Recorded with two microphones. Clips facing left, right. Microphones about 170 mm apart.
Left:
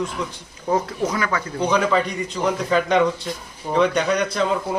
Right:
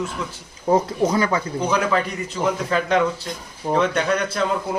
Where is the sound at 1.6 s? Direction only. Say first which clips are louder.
Left 3 dB; 5° right (ahead or behind).